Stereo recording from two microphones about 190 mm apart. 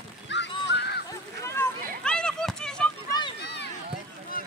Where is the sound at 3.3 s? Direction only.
60° left (ahead or behind).